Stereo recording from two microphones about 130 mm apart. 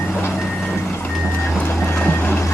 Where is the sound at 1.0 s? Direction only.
15° left (ahead or behind).